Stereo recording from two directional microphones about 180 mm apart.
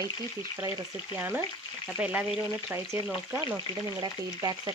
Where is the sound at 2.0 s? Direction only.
5° right (ahead or behind).